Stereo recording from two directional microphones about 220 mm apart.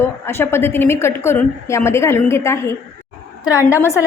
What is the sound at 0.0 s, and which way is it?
A woman's voice, 10° left (ahead or behind).